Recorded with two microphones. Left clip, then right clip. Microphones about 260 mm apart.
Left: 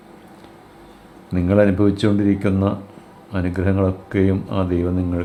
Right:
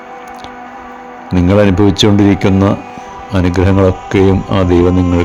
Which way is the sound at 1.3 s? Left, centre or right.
Right.